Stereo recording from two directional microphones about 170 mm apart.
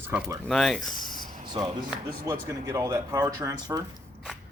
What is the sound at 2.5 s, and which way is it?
Speech, 20° right (ahead or behind).